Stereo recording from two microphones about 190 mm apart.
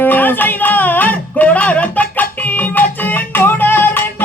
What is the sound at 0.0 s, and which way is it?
Music, 10° left (ahead or behind).